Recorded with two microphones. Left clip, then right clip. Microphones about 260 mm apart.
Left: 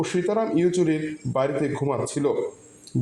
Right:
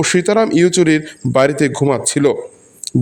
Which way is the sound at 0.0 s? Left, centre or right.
Right.